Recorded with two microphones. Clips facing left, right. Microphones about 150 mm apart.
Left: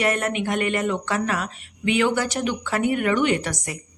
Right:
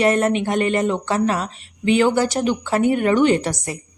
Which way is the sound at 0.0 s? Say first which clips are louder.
Right 6 dB; 30° right (ahead or behind).